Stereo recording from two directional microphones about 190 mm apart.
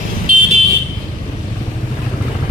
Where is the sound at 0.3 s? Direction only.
45° right (ahead or behind).